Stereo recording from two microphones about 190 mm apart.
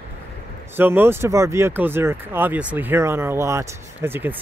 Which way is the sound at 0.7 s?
10° right (ahead or behind).